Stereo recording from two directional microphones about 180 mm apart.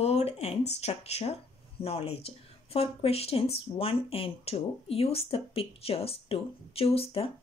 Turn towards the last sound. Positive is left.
turn(degrees=30)  # may be behind; listen again after turning